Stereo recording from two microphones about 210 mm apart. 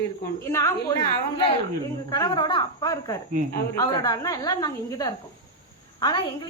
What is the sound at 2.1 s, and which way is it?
A woman's voice, 20° left (ahead or behind).